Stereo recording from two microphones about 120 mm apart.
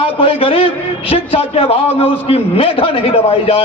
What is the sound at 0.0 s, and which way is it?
A man's voice, 50° left (ahead or behind).